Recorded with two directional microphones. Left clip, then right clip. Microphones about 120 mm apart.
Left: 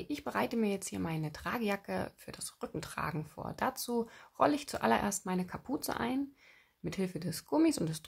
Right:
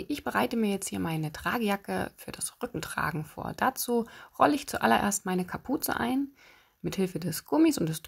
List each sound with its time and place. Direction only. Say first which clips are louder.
0.0 s speech: right 6 dB; 35° right (ahead or behind)